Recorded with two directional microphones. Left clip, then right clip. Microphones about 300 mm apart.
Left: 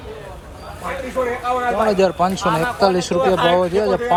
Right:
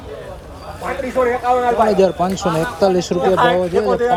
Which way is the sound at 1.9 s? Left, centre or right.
Centre.